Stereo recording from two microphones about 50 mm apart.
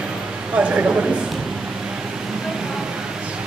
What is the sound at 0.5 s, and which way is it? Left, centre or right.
Speech, right.